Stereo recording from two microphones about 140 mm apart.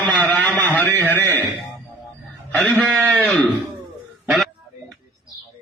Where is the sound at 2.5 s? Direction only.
10° left (ahead or behind).